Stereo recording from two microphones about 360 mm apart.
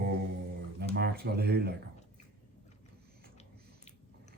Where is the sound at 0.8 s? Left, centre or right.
Right.